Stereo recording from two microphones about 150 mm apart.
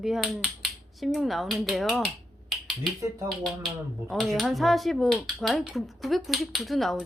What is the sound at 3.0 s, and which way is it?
Speech, 20° right (ahead or behind).